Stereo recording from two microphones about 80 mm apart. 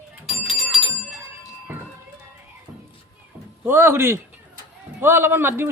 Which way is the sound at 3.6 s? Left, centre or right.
Right.